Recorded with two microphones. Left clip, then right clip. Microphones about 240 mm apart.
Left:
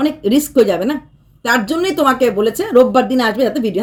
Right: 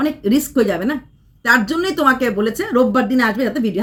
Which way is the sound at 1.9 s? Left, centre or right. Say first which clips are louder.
Left 2 dB; left.